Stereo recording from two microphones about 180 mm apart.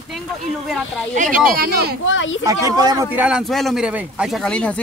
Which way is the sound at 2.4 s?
20° right (ahead or behind).